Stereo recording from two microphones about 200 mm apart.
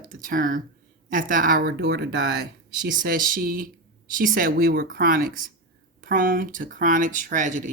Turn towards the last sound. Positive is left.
turn(degrees=-40)  # may be behind; listen again after turning